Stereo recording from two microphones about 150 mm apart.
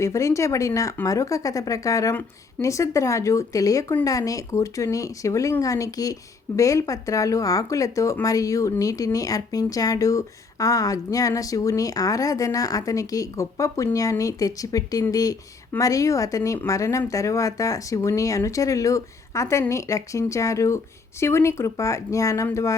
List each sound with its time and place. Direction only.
0.0 s speech: 20° left (ahead or behind)